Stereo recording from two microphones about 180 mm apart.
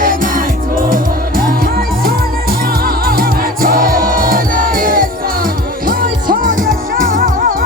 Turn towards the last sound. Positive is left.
turn(degrees=-50)  # may be behind; listen again after turning